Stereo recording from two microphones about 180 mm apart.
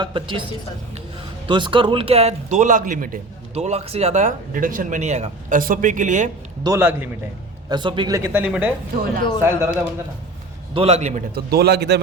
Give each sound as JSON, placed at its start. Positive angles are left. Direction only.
{"t": 0.0, "sound": "a woman's voice", "side_deg": -30}
{"t": 1.5, "sound": "a man's voice", "side_deg": -30}
{"t": 3.5, "sound": "speech", "side_deg": -35}
{"t": 6.6, "sound": "speech", "side_deg": -15}
{"t": 7.7, "sound": "speech", "side_deg": -25}
{"t": 10.8, "sound": "a man's voice", "side_deg": -35}
{"t": 11.3, "sound": "speech", "side_deg": -60}